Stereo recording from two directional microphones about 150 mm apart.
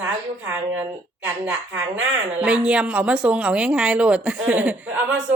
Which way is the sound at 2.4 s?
10° right (ahead or behind).